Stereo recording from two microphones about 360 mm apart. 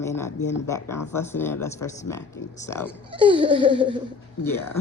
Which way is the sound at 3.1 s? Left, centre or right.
Centre.